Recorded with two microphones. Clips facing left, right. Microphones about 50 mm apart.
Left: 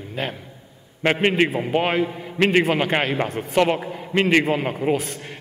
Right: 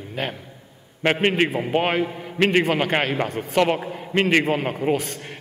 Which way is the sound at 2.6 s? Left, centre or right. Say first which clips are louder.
Left 1 dB; centre.